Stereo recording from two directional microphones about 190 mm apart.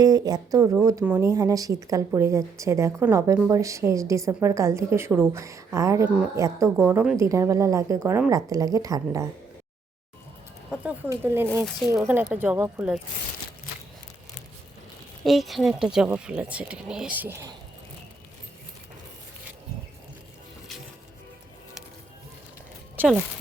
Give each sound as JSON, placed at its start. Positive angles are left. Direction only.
{"t": 0.0, "sound": "speech", "side_deg": -20}
{"t": 10.7, "sound": "speech", "side_deg": -10}
{"t": 15.2, "sound": "speech", "side_deg": 0}
{"t": 23.0, "sound": "speech", "side_deg": -10}